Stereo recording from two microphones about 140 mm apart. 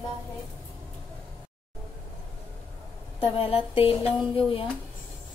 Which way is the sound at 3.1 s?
40° left (ahead or behind).